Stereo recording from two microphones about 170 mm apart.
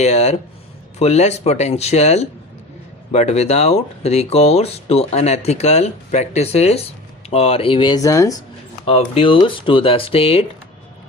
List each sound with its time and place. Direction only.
0.0 s speech: 40° left (ahead or behind); by 8.4 s 20° left (ahead or behind)
8.8 s speech: 35° left (ahead or behind)